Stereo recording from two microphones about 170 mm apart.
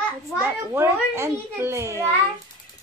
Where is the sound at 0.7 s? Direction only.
15° right (ahead or behind).